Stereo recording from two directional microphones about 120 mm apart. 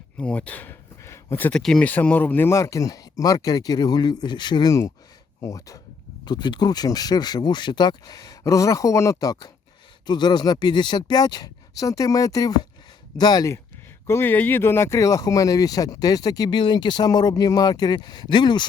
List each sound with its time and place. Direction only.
0.2 s a sound: 10° left (ahead or behind)
1.5 s speech: 5° left (ahead or behind); by 13.6 s 30° left (ahead or behind)
14.1 s speech: 15° left (ahead or behind); by 18.6 s 40° left (ahead or behind)